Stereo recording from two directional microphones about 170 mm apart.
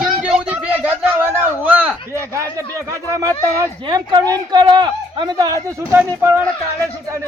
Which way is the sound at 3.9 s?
25° right (ahead or behind).